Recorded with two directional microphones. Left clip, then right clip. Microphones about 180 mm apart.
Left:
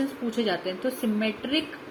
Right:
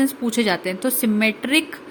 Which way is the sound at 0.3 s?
45° right (ahead or behind).